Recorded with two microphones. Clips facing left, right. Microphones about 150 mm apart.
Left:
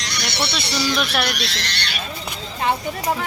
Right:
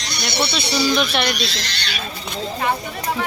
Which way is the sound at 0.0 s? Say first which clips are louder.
Right 2 dB; 90° left.